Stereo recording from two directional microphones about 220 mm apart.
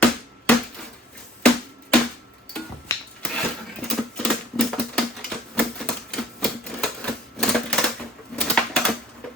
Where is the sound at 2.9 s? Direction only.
15° left (ahead or behind).